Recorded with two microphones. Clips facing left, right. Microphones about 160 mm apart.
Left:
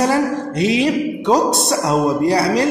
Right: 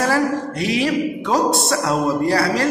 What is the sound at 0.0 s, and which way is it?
A woman's voice, 20° left (ahead or behind).